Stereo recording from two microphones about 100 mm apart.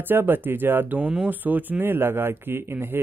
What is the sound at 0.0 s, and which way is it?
Speech, 20° right (ahead or behind).